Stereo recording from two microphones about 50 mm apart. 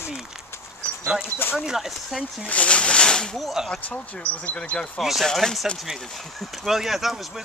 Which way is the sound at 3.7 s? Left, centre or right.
Left.